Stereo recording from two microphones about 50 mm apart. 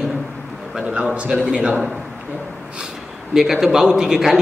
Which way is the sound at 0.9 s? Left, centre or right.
Right.